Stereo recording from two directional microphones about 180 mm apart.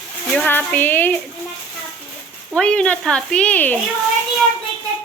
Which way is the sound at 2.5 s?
5° left (ahead or behind).